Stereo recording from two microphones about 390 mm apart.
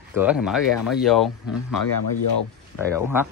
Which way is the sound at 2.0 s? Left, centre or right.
Left.